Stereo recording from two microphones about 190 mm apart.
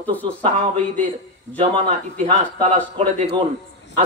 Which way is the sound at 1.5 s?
35° right (ahead or behind).